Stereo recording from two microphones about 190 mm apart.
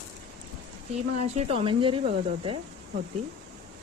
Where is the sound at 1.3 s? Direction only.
30° right (ahead or behind).